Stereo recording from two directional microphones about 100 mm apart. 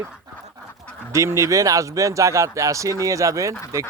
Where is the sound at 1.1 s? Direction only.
30° right (ahead or behind).